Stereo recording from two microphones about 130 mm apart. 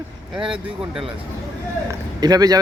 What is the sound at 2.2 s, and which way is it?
Speech, 30° right (ahead or behind).